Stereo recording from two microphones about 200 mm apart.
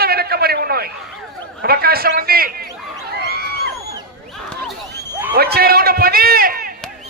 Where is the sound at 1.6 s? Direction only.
50° right (ahead or behind).